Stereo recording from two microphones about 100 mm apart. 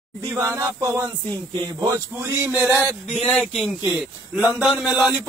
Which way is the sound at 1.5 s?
35° right (ahead or behind).